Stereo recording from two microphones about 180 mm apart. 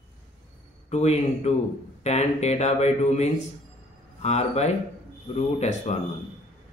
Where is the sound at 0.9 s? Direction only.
35° left (ahead or behind).